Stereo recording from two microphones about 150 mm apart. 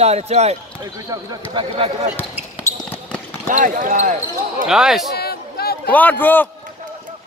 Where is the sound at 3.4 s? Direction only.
60° right (ahead or behind).